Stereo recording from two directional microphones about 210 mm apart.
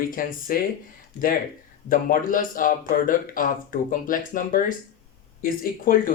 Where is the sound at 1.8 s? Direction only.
40° left (ahead or behind).